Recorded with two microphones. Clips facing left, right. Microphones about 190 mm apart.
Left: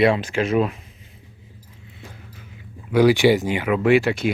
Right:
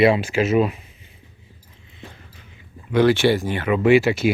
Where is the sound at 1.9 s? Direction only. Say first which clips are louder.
Right 1 dB; 5° left (ahead or behind).